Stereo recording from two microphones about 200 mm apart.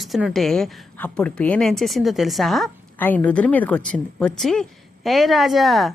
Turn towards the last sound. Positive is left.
turn(degrees=0)  # may be behind; listen again after turning